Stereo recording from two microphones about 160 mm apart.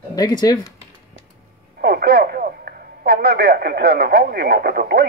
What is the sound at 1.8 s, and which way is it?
Speech, 90° right.